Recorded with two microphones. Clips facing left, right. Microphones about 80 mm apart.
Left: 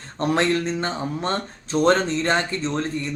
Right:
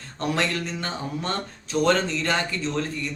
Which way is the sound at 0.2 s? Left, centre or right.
Left.